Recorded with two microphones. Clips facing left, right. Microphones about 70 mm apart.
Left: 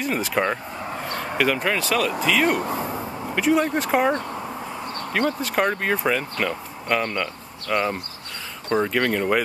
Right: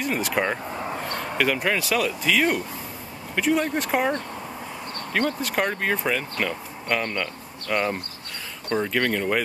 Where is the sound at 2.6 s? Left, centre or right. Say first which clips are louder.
Left 9 dB; left.